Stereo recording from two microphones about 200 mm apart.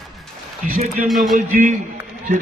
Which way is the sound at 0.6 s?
40° right (ahead or behind).